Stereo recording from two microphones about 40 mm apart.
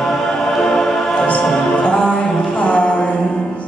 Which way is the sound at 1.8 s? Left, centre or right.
Left.